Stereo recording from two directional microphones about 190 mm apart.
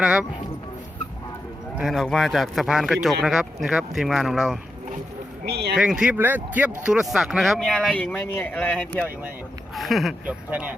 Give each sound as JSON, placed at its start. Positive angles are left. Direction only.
{"t": 0.0, "sound": "speech", "side_deg": -5}
{"t": 1.8, "sound": "speech", "side_deg": 0}
{"t": 5.5, "sound": "speech", "side_deg": -60}
{"t": 5.7, "sound": "speech", "side_deg": -5}